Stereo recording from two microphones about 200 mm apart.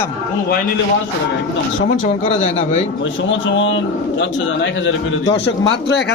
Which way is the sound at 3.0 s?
65° left (ahead or behind).